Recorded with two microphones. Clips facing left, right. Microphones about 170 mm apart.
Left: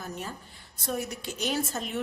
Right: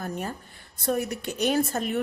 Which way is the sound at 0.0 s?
55° right (ahead or behind).